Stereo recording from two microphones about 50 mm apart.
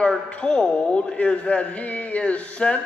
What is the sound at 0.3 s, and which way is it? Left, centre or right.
Speech, left.